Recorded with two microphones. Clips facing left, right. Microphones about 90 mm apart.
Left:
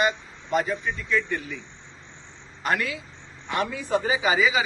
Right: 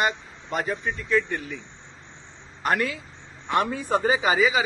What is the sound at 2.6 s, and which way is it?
A man's voice, 45° right (ahead or behind).